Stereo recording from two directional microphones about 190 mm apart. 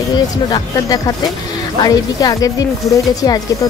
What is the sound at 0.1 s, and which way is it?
Speech, 20° left (ahead or behind).